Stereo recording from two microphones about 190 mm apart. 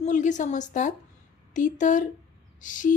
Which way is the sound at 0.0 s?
40° left (ahead or behind).